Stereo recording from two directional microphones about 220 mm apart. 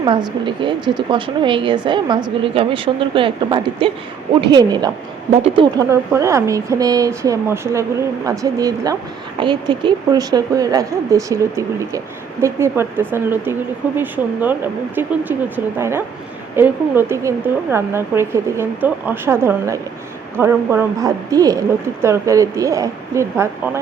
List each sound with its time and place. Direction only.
0.0 s a woman's voice: 20° right (ahead or behind)